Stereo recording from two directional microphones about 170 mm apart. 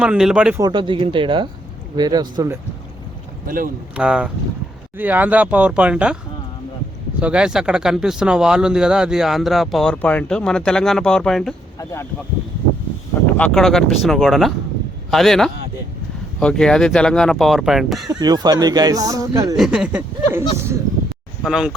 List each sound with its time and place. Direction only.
0.0 s speech: 5° right (ahead or behind)
0.5 s speech: 25° right (ahead or behind)
3.4 s speech: 55° right (ahead or behind)
3.9 s speech: 5° right (ahead or behind)
7.2 s speech: 5° right (ahead or behind)
11.8 s speech: 15° left (ahead or behind)
13.3 s speech: 5° left (ahead or behind)
18.1 s speech: 25° right (ahead or behind)
19.5 s speech: 5° right (ahead or behind)
21.4 s speech: 5° right (ahead or behind)